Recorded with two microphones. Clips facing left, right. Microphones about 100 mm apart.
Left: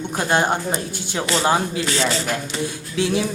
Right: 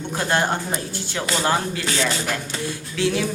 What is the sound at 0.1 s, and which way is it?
Speech, 20° left (ahead or behind).